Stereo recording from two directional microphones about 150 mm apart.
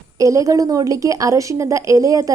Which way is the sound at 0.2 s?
20° right (ahead or behind).